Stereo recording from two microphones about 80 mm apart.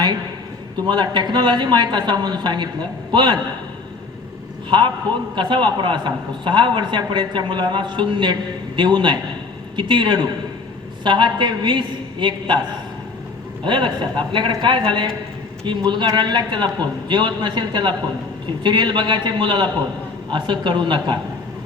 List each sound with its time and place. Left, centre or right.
0.9 s a man's voice: right
5.3 s a man's voice: right
13.7 s a man's voice: right
15.9 s a man's voice: right